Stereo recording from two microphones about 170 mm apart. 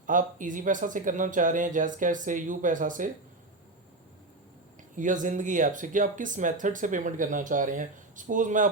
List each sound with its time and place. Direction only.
0.0 s speech: 50° right (ahead or behind)
4.9 s speech: 50° right (ahead or behind)